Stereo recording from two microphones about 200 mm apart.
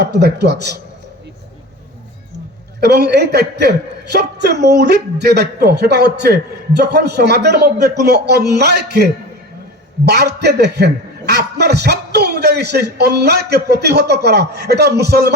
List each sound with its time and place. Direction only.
0.0 s a man's voice: 55° right (ahead or behind)
2.8 s a man's voice: 55° right (ahead or behind)
10.1 s a man's voice: 55° right (ahead or behind)